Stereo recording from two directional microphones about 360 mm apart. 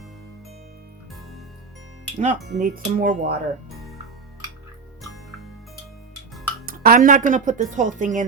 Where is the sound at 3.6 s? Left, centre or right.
Centre.